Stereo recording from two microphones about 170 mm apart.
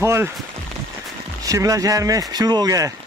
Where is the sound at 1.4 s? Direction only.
20° right (ahead or behind).